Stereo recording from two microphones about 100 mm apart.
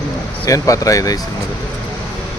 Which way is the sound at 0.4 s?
35° left (ahead or behind).